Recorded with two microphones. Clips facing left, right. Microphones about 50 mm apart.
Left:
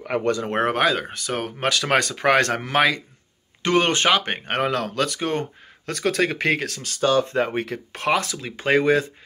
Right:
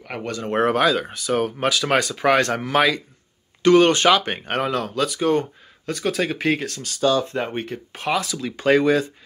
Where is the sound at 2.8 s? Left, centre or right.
Left.